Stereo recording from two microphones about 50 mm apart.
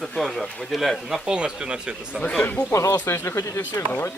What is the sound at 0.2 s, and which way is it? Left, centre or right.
A man's voice, centre.